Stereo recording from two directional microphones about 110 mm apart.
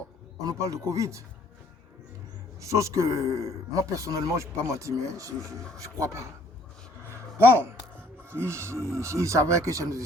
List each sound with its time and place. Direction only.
0.4 s speech: 30° right (ahead or behind)
2.6 s speech: 30° right (ahead or behind)
7.1 s a sound: 20° right (ahead or behind)
7.9 s speech: 20° right (ahead or behind)